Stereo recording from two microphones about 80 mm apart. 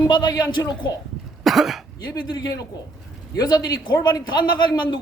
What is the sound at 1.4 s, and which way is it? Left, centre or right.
Speech, centre.